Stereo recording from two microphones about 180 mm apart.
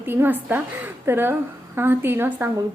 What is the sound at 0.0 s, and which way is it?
A woman's voice, 10° right (ahead or behind).